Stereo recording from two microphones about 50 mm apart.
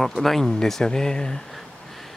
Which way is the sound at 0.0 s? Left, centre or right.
Centre.